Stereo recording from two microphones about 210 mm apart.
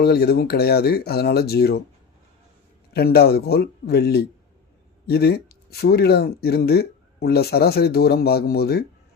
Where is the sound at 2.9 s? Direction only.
50° left (ahead or behind).